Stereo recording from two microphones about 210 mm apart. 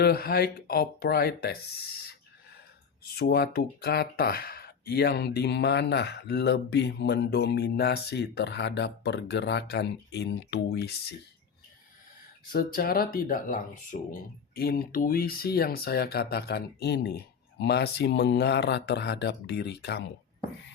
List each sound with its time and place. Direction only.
0.0 s speech: 45° left (ahead or behind)
12.5 s speech: 45° left (ahead or behind)